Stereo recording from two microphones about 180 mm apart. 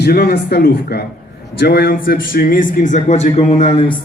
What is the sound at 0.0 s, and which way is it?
A man's voice, 60° left (ahead or behind).